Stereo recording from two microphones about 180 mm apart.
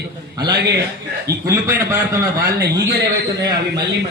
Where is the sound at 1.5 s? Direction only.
15° right (ahead or behind).